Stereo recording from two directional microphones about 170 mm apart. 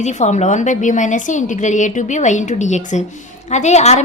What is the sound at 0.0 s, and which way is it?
A woman's voice, 45° left (ahead or behind).